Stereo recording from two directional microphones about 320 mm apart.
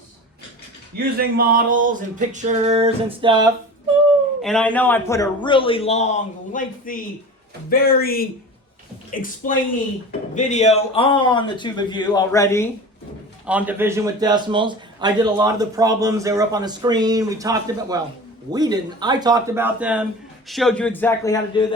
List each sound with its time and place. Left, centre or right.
0.9 s a sound: right
4.4 s a man's voice: centre
13.4 s a man's voice: centre